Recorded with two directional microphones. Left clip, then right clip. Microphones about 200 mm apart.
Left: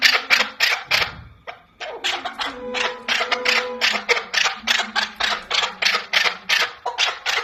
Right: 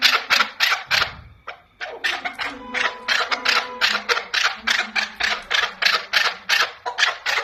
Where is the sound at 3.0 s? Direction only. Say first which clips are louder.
Left 1 dB; 15° right (ahead or behind).